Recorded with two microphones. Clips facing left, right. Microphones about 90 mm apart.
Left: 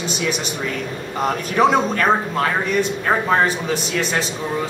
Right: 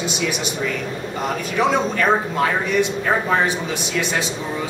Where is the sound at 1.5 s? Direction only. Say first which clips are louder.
Left 3 dB; 45° left (ahead or behind).